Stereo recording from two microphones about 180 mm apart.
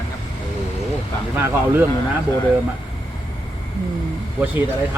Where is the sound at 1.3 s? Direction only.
10° right (ahead or behind).